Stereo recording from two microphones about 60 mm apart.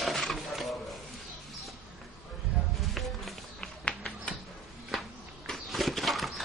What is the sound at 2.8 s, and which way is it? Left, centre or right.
Music, centre.